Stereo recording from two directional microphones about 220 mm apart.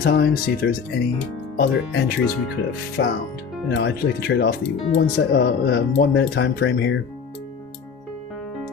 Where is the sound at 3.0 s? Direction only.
50° left (ahead or behind).